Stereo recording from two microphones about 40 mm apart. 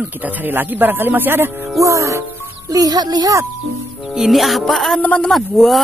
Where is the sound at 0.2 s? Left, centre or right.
Right.